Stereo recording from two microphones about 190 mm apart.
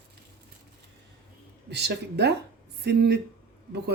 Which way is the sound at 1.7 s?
60° right (ahead or behind).